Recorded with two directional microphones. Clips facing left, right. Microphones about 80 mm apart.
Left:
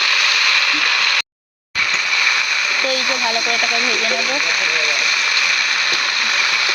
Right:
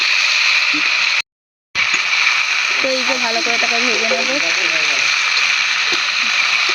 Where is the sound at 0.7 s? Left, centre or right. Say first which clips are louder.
Left 1 dB; left.